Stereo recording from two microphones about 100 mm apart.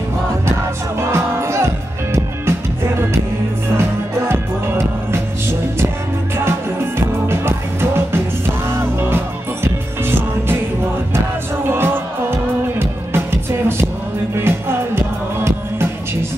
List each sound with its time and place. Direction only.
1.1 s music: 25° right (ahead or behind)
7.0 s music: 25° right (ahead or behind)
11.7 s music: 20° right (ahead or behind)